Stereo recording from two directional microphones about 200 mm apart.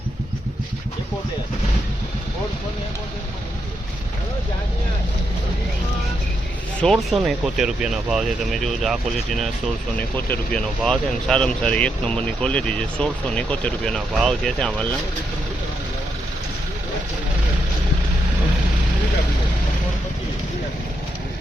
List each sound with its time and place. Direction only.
6.8 s speech: centre (ahead or behind)